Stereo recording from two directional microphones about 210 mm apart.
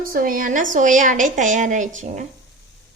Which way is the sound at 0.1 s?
40° right (ahead or behind).